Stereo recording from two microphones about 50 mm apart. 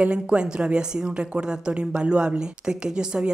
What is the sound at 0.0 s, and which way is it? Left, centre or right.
A woman's voice, right.